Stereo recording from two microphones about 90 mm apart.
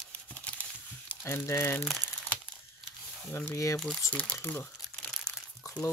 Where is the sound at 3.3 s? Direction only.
30° left (ahead or behind).